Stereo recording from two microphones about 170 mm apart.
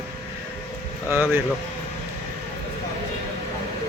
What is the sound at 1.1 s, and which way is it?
Speech, 10° right (ahead or behind).